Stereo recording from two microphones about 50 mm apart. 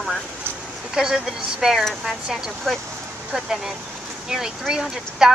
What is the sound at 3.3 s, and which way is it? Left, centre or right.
Speech, centre.